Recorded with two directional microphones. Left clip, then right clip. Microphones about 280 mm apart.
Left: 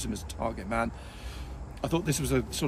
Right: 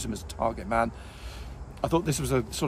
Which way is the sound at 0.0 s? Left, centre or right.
Centre.